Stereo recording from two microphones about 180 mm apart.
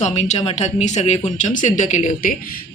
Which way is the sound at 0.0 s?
40° left (ahead or behind).